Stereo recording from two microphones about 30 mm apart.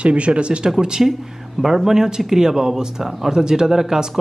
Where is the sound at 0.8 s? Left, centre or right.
Right.